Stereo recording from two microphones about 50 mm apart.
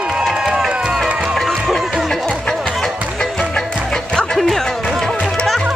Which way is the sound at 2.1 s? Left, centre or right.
Centre.